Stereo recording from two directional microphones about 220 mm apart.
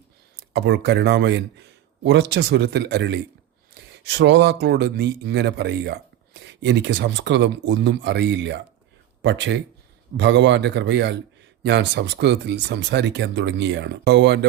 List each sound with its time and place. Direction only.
0.5 s speech: 55° right (ahead or behind)